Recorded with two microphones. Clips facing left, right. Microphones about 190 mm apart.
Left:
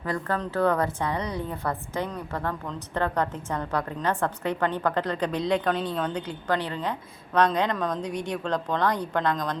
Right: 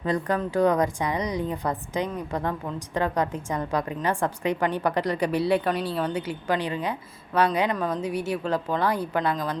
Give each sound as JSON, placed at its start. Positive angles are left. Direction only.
{"t": 0.0, "sound": "a woman's voice", "side_deg": -20}